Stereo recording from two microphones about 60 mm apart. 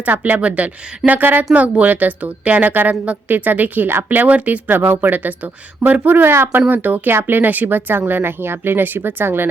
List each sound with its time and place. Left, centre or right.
0.0 s a woman's voice: right